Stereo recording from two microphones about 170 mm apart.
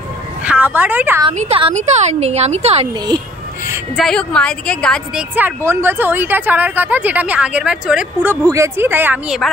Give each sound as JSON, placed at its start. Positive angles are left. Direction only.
{"t": 0.5, "sound": "a woman's voice", "side_deg": -10}
{"t": 1.4, "sound": "speech", "side_deg": -35}
{"t": 3.9, "sound": "a woman's voice", "side_deg": 5}
{"t": 5.3, "sound": "speech", "side_deg": -10}